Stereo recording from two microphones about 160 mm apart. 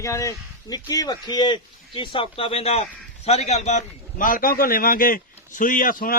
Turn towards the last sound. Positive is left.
turn(degrees=60)  # may be behind; listen again after turning